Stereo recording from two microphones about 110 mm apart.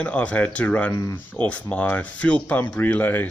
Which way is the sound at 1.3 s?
15° left (ahead or behind).